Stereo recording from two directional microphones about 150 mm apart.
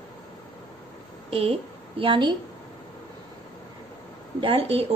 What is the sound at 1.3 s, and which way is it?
A woman's voice, 40° right (ahead or behind).